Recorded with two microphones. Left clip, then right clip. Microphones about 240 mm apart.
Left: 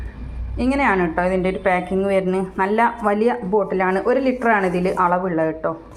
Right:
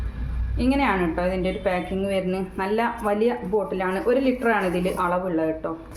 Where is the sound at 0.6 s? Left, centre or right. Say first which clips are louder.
Left 4 dB; centre.